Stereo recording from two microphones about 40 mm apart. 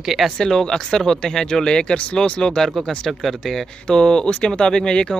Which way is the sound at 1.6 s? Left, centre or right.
Left.